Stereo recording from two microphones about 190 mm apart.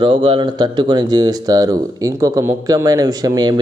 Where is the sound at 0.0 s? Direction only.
25° right (ahead or behind).